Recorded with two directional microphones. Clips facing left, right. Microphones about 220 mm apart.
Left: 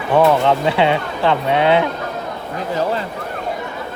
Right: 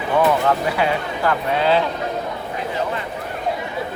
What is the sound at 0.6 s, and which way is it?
Speech, 25° left (ahead or behind).